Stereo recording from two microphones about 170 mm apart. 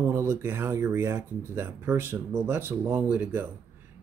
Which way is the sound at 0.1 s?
15° right (ahead or behind).